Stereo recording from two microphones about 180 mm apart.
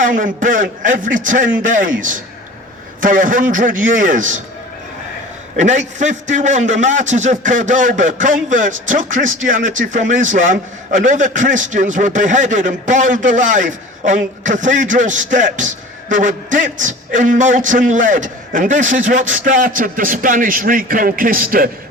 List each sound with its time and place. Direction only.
0.0 s speech: 45° right (ahead or behind)
5.5 s speech: 40° right (ahead or behind)